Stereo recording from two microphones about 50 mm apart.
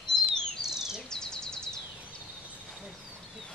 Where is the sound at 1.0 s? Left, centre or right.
Centre.